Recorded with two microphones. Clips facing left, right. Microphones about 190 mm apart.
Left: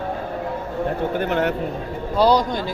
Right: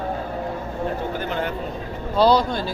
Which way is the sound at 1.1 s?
60° left (ahead or behind).